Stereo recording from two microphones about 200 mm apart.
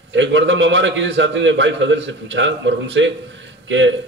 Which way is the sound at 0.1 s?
65° right (ahead or behind).